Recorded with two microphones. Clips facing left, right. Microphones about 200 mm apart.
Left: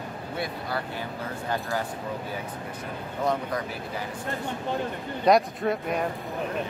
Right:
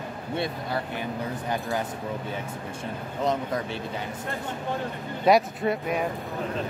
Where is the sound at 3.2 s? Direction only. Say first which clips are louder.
Right 1 dB; 25° right (ahead or behind).